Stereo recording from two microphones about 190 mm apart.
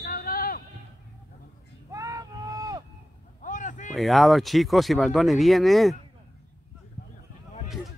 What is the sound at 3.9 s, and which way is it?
Speech, centre (ahead or behind).